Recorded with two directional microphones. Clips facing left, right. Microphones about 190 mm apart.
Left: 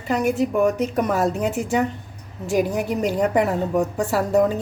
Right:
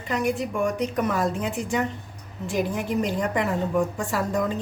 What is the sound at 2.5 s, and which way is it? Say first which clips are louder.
A woman's voice: left 5 dB; 40° left (ahead or behind).